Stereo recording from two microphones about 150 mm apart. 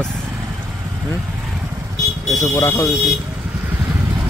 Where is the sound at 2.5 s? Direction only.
25° left (ahead or behind).